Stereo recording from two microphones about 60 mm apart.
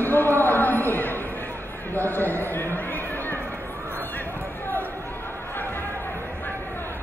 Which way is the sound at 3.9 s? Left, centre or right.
Left.